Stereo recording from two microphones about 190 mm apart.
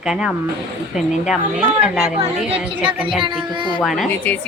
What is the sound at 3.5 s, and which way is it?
Speech, 25° right (ahead or behind).